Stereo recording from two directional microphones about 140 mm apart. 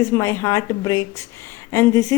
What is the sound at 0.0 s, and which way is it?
A woman's voice, 20° left (ahead or behind).